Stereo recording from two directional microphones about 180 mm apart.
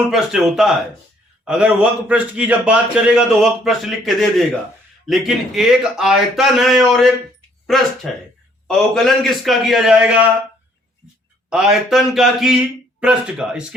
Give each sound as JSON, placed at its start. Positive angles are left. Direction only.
{"t": 0.1, "sound": "a man's voice", "side_deg": -5}
{"t": 11.4, "sound": "a man's voice", "side_deg": -5}